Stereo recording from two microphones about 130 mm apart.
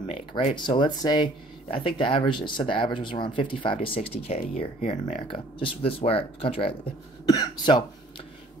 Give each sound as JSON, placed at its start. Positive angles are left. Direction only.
{"t": 0.3, "sound": "speech", "side_deg": 50}
{"t": 0.6, "sound": "speech", "side_deg": 35}
{"t": 4.8, "sound": "speech", "side_deg": 65}
{"t": 5.1, "sound": "speech", "side_deg": 40}